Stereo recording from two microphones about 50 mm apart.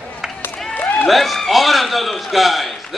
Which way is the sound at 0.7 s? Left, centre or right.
Left.